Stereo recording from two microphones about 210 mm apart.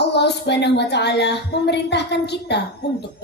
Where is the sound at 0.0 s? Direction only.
55° left (ahead or behind).